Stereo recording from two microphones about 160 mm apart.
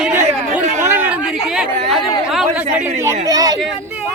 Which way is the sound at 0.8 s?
15° right (ahead or behind).